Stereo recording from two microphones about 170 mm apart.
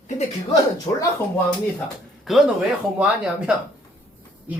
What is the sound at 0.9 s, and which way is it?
Speech, 25° left (ahead or behind).